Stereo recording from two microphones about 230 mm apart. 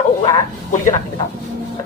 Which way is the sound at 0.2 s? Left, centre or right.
Left.